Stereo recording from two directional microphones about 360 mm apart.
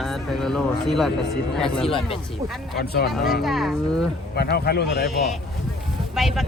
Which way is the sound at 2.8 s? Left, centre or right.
Left.